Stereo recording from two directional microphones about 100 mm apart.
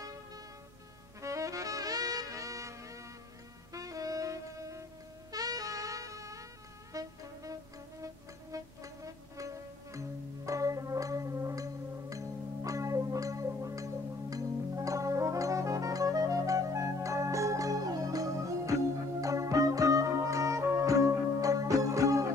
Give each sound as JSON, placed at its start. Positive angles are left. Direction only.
{"t": 1.2, "sound": "music", "side_deg": -35}
{"t": 14.3, "sound": "brass instrument", "side_deg": -35}
{"t": 19.2, "sound": "music", "side_deg": -35}